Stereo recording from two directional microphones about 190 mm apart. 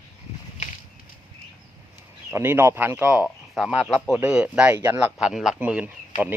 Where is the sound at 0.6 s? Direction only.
40° left (ahead or behind).